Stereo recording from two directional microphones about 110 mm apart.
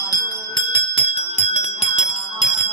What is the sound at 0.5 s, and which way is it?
Bell, 55° left (ahead or behind).